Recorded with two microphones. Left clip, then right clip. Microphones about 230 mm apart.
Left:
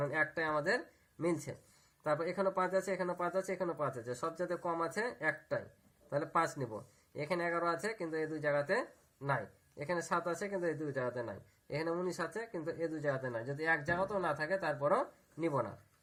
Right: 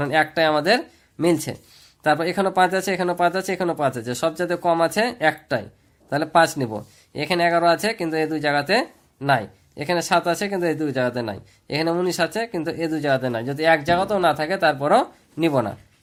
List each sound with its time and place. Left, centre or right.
0.0 s speech: right